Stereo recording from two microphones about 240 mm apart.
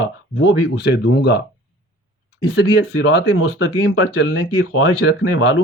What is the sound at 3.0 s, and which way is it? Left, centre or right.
Speech, left.